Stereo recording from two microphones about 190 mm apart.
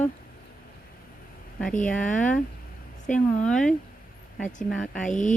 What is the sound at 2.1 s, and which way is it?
Speech, 5° left (ahead or behind).